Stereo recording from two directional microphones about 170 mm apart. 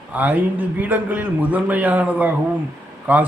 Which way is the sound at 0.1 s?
10° right (ahead or behind).